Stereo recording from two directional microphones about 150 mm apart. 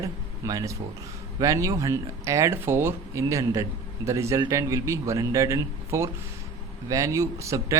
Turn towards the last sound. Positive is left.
turn(degrees=-20)  # may be behind; listen again after turning